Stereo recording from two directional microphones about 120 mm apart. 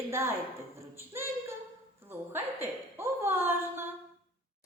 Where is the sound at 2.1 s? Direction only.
20° right (ahead or behind).